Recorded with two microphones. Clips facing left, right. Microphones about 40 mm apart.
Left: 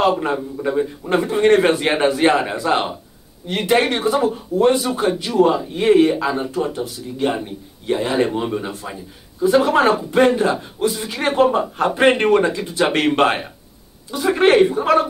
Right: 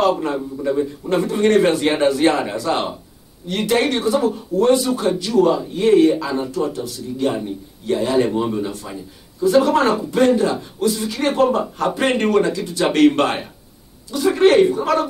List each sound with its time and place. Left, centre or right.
0.2 s speech: left